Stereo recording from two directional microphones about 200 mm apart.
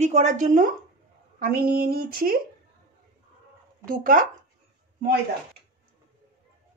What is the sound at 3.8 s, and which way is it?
Speech, 45° right (ahead or behind).